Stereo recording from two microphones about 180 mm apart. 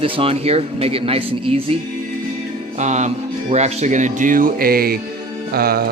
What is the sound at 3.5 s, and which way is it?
Speech, 40° right (ahead or behind).